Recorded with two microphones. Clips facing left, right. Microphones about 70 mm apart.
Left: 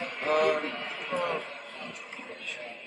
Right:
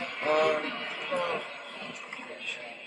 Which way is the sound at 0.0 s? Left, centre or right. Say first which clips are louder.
Even; centre.